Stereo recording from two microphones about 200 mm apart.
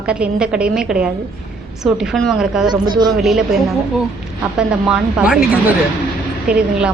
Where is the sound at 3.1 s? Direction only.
Centre (ahead or behind).